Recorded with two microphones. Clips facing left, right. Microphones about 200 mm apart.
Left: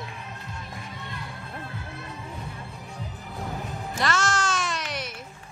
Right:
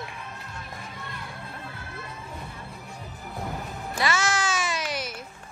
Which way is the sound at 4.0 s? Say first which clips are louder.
Even; 5° right (ahead or behind).